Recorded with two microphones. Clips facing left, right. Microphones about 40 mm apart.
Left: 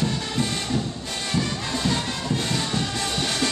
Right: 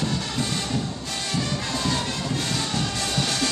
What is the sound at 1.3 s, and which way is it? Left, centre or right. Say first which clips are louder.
Music: left 1 dB; centre.